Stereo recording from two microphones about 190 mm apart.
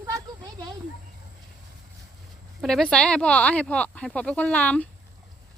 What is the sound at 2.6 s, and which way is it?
Speech, centre (ahead or behind).